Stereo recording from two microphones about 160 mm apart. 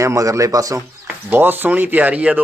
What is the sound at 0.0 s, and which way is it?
A man's voice, 20° right (ahead or behind).